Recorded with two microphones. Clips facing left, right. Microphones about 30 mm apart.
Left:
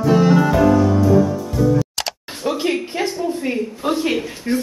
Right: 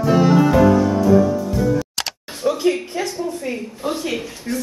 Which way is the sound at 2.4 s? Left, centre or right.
Left.